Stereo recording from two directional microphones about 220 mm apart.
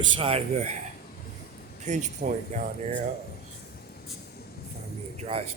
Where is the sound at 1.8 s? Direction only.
35° right (ahead or behind).